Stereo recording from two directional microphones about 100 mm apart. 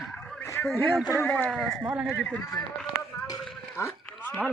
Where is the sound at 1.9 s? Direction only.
10° right (ahead or behind).